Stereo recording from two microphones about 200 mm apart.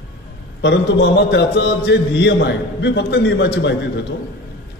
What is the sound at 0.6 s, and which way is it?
A man's voice, 60° left (ahead or behind).